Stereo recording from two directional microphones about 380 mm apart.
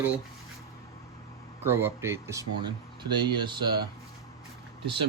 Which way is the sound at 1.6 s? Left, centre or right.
Centre.